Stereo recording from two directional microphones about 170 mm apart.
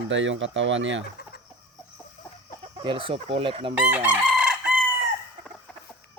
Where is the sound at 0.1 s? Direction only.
90° right.